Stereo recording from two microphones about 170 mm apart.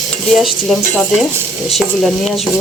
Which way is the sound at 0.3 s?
Centre (ahead or behind).